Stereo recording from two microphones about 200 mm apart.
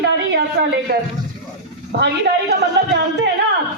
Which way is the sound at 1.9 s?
60° right (ahead or behind).